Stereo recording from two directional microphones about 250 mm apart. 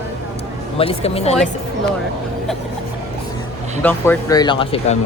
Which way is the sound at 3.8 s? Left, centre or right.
Centre.